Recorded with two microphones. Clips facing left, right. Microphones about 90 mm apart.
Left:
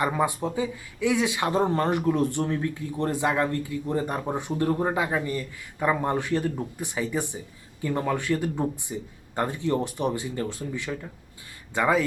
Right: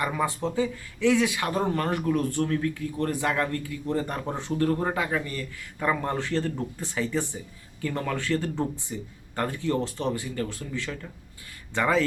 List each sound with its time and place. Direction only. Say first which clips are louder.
0.0 s speech: left 2 dB; 20° left (ahead or behind)